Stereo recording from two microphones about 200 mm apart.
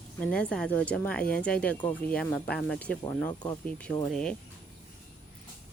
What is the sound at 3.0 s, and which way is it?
Speech, 20° left (ahead or behind).